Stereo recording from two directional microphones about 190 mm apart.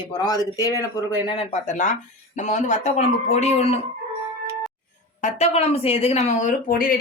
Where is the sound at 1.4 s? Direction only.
40° left (ahead or behind).